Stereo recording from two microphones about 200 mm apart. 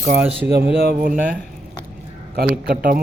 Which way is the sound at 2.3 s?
50° right (ahead or behind).